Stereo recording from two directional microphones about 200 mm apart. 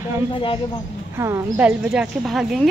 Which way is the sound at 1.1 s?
15° right (ahead or behind).